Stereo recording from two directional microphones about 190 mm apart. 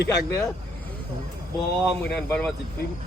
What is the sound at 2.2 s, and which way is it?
Speech, 5° left (ahead or behind).